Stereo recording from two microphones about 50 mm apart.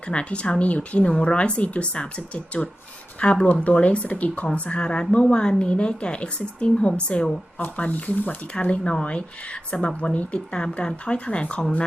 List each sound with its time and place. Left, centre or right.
0.1 s speech: left
8.5 s speech: left